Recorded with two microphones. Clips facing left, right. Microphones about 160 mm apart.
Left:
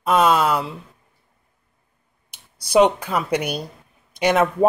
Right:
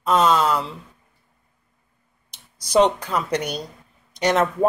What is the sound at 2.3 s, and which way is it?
Speech, 10° left (ahead or behind).